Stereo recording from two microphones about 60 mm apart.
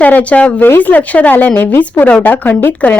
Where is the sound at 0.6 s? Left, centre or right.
Left.